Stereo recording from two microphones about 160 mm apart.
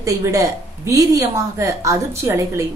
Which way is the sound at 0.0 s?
20° right (ahead or behind).